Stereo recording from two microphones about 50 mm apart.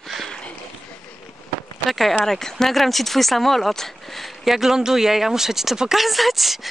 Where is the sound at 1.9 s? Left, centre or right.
Centre.